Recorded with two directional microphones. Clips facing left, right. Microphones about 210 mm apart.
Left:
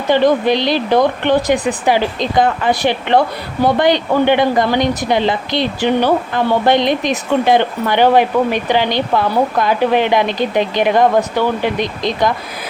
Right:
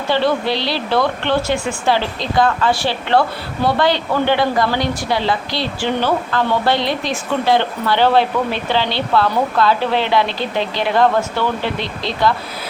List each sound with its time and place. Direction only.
0.1 s speech: 15° left (ahead or behind)